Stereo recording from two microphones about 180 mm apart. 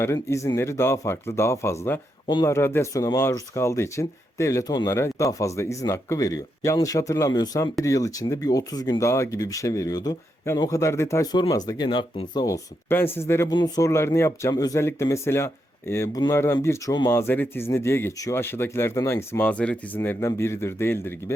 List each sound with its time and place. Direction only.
0.0 s speech: 15° left (ahead or behind)
12.9 s speech: 15° left (ahead or behind)